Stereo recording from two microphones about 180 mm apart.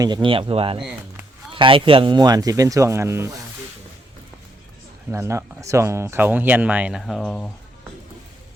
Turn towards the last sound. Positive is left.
turn(degrees=5)  # may be behind; listen again after turning